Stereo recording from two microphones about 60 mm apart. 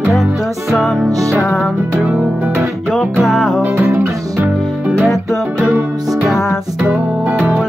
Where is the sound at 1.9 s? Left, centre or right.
Centre.